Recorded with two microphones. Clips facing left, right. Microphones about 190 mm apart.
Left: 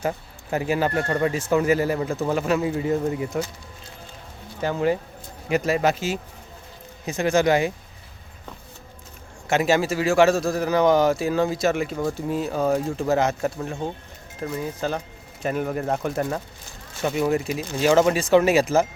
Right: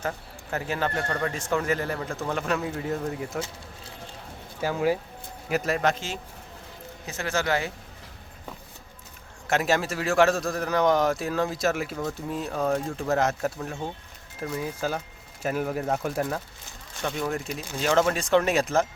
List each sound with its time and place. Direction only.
0.5 s a man's voice: 10° left (ahead or behind)
4.6 s a man's voice: 5° right (ahead or behind); by 7.7 s 15° left (ahead or behind)
9.5 s a man's voice: centre (ahead or behind)